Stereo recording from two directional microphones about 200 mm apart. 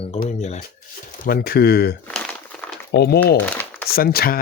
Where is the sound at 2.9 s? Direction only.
55° left (ahead or behind).